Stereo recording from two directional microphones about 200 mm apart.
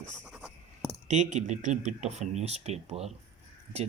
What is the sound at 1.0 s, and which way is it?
Speech, 35° right (ahead or behind).